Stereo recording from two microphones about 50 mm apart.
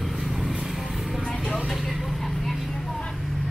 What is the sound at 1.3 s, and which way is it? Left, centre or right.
Vehicle, centre.